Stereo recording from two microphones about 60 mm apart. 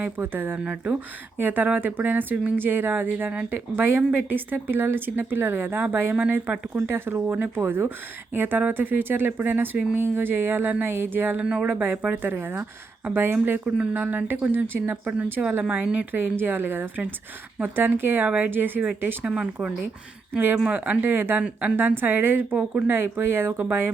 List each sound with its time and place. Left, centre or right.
0.0 s speech: right
11.3 s speech: right
11.7 s speech: right
13.7 s speech: right
15.4 s speech: right
16.2 s speech: right
18.3 s speech: right
19.2 s speech: centre
20.7 s speech: right